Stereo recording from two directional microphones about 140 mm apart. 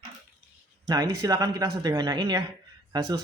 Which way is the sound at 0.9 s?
25° right (ahead or behind).